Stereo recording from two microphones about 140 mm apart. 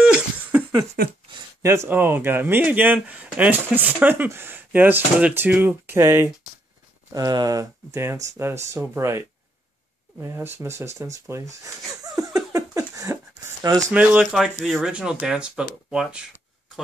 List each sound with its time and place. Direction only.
0.0 s laughter: 10° right (ahead or behind)
1.0 s speech: 90° right
1.3 s speech: 20° right (ahead or behind)
10.2 s speech: 20° right (ahead or behind)
11.2 s a sound: 20° right (ahead or behind)
13.9 s speech: 5° right (ahead or behind)